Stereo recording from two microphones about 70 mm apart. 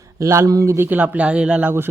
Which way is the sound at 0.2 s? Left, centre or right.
Right.